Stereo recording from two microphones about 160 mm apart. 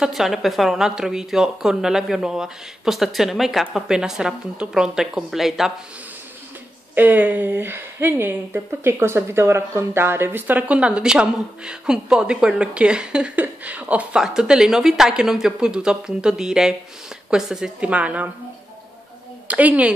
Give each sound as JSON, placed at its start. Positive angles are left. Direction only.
{"t": 0.0, "sound": "speech", "side_deg": 0}
{"t": 7.0, "sound": "a woman's voice", "side_deg": -10}
{"t": 19.4, "sound": "a woman's voice", "side_deg": -10}